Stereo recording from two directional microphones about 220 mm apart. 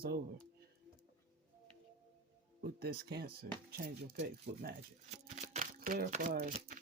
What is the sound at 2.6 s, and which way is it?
Speech, 45° right (ahead or behind).